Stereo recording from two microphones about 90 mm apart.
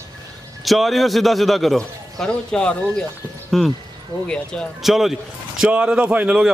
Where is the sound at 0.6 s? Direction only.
Centre (ahead or behind).